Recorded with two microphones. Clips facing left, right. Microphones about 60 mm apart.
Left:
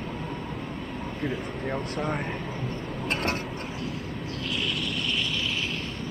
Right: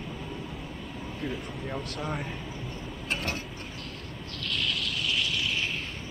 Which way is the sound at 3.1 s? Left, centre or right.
Left.